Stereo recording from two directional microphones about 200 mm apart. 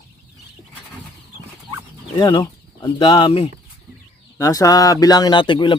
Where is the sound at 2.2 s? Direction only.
20° left (ahead or behind).